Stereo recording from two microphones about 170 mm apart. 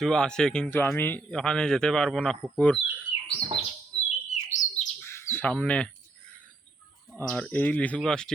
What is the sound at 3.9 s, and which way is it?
Bird, 35° left (ahead or behind).